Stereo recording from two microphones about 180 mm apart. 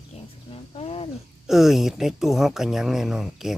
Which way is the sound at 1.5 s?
Centre (ahead or behind).